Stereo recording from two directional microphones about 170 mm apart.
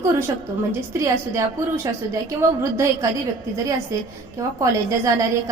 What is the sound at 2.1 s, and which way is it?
A woman's voice, 15° right (ahead or behind).